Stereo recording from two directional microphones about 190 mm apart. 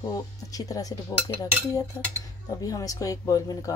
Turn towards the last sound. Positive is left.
turn(degrees=20)  # may be behind; listen again after turning